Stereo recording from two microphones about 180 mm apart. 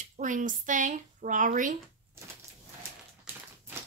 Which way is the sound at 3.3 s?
10° right (ahead or behind).